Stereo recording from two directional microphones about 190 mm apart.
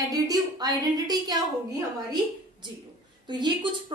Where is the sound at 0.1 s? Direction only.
20° right (ahead or behind).